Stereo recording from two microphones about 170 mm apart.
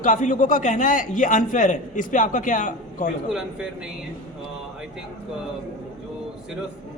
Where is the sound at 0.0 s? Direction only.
50° left (ahead or behind).